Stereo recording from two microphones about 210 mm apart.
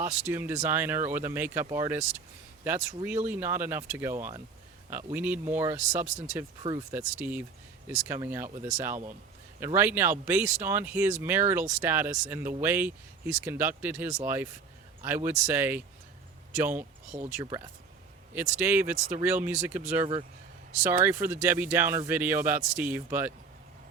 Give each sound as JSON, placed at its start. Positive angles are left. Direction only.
{"t": 0.0, "sound": "speech", "side_deg": -10}
{"t": 6.6, "sound": "speech", "side_deg": -20}
{"t": 6.9, "sound": "speech", "side_deg": -10}
{"t": 20.8, "sound": "speech", "side_deg": -10}